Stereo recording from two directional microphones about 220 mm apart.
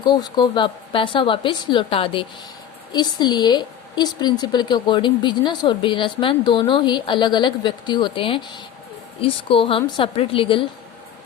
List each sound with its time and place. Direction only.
0.0 s a woman's voice: 20° left (ahead or behind)